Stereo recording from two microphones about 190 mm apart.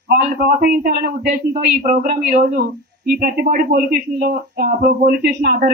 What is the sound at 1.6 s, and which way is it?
Speech, 45° right (ahead or behind).